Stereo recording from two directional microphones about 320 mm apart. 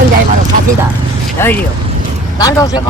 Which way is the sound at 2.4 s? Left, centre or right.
Centre.